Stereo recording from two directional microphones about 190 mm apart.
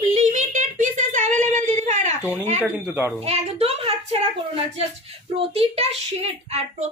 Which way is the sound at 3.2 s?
35° right (ahead or behind).